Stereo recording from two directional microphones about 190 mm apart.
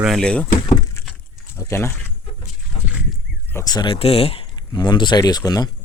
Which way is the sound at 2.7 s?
30° left (ahead or behind).